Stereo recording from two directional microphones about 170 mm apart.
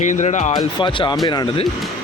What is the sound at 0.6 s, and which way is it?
Speech, 25° left (ahead or behind).